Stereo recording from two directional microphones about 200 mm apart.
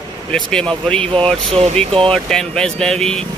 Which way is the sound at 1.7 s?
25° right (ahead or behind).